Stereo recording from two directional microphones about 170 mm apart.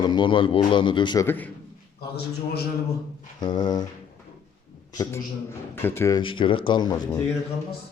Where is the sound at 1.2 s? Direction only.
10° left (ahead or behind).